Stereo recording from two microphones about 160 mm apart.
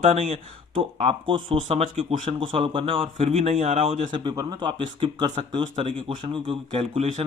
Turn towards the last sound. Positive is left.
turn(degrees=-40)  # may be behind; listen again after turning